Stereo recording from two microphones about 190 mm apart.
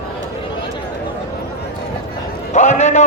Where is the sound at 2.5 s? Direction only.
40° left (ahead or behind).